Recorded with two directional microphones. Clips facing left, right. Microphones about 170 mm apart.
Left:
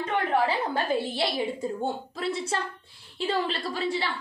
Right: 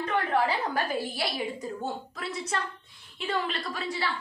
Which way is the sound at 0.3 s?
25° left (ahead or behind).